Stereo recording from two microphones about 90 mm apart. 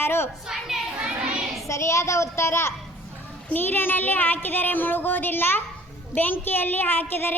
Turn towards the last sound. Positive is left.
turn(degrees=25)  # may be behind; listen again after turning